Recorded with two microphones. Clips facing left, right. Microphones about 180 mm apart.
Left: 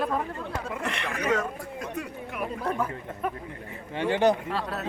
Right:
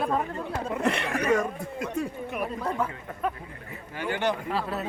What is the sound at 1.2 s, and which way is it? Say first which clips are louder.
Speech: right 1 dB; 10° right (ahead or behind).